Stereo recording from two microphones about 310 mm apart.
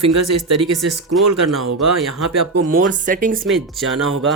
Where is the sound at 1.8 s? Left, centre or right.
Right.